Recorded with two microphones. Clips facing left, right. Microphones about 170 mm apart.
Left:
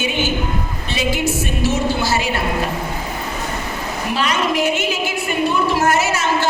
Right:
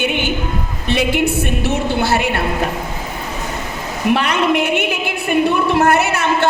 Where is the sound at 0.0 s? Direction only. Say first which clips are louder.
Right 2 dB; 60° right (ahead or behind).